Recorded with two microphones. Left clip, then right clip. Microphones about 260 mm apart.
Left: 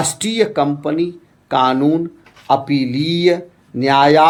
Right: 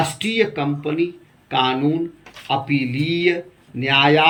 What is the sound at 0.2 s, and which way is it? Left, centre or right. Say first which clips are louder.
Speech: left 4 dB; centre.